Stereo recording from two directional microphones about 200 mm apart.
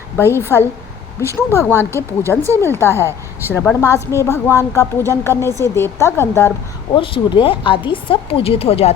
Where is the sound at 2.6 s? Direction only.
10° left (ahead or behind).